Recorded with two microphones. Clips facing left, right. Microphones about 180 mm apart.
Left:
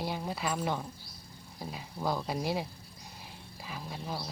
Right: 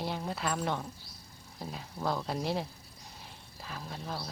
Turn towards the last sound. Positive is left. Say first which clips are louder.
# left 1 dB
turn(degrees=5)  # may be behind; listen again after turning